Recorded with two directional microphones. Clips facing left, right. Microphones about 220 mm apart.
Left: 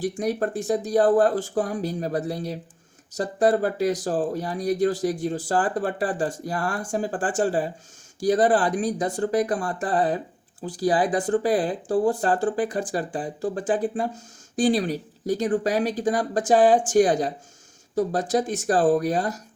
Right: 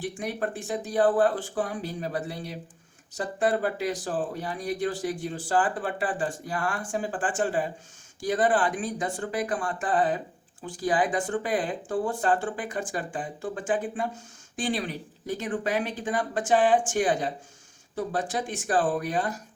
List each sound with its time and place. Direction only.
0.0 s speech: 40° left (ahead or behind)